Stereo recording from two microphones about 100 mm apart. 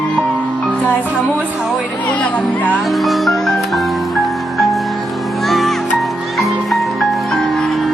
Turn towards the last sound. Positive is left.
turn(degrees=0)  # may be behind; listen again after turning